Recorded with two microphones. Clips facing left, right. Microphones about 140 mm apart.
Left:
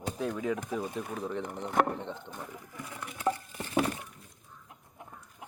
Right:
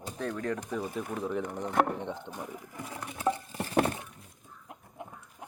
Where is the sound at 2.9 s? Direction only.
30° right (ahead or behind).